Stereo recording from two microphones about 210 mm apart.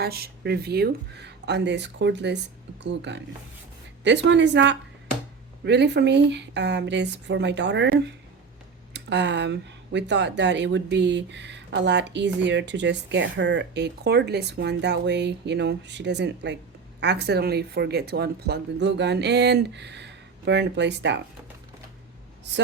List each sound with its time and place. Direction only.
0.0 s speech: 50° right (ahead or behind)